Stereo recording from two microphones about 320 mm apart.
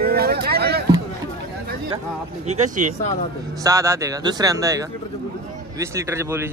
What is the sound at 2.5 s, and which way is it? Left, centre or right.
Speech, right.